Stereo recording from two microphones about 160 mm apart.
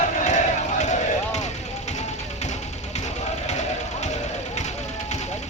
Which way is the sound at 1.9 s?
45° left (ahead or behind).